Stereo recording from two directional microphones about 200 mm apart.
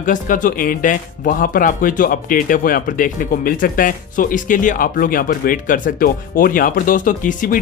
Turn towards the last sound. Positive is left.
turn(degrees=40)  # may be behind; listen again after turning